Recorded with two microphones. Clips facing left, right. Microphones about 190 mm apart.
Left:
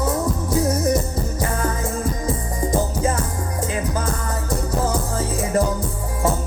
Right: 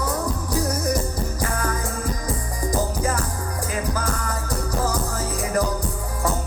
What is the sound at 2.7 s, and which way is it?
Music, 25° left (ahead or behind).